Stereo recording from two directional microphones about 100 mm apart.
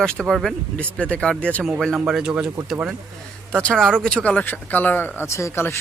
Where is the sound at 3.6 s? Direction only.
5° left (ahead or behind).